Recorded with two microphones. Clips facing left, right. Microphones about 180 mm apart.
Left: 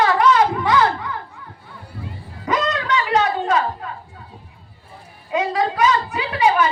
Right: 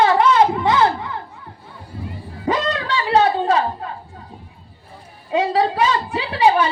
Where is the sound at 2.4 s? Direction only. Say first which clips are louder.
Right 1 dB; 30° right (ahead or behind).